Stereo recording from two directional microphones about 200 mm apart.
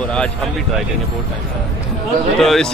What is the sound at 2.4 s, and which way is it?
Speech, centre (ahead or behind).